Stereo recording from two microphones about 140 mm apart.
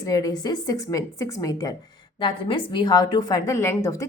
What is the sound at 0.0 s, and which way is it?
A woman's voice, 25° left (ahead or behind).